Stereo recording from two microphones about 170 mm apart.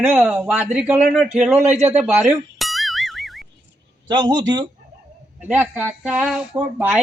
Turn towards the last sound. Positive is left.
turn(degrees=-5)  # may be behind; listen again after turning